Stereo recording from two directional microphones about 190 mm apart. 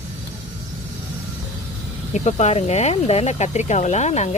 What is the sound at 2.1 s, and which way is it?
Speech, 35° left (ahead or behind).